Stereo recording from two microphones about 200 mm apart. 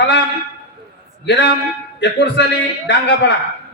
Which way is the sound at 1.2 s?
60° left (ahead or behind).